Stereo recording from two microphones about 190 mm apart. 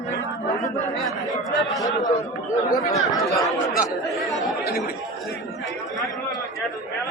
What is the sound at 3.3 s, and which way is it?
Speech, centre (ahead or behind).